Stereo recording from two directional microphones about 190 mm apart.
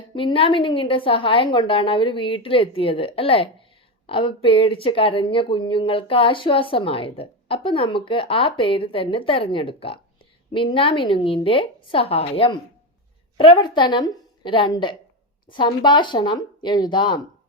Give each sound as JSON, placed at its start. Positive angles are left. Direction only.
{"t": 0.1, "sound": "speech", "side_deg": 25}